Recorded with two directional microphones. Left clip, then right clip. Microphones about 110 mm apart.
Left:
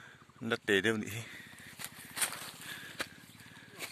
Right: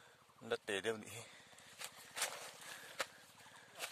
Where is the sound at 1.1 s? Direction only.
20° right (ahead or behind).